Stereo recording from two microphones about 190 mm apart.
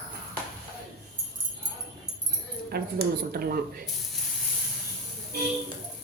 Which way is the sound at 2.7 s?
55° right (ahead or behind).